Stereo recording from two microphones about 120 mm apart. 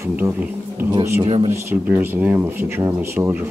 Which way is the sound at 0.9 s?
30° right (ahead or behind).